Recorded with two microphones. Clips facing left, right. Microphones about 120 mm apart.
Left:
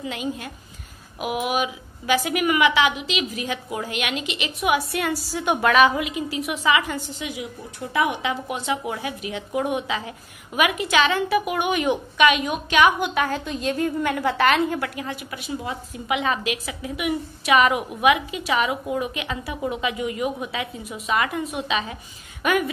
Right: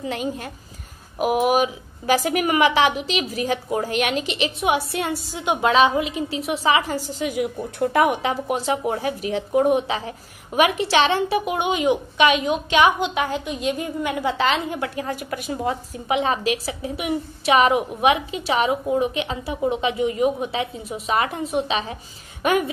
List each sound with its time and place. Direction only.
0.0 s a woman's voice: 40° right (ahead or behind); by 12.3 s 15° right (ahead or behind)
12.3 s a woman's voice: 25° right (ahead or behind)
15.0 s a woman's voice: 40° right (ahead or behind)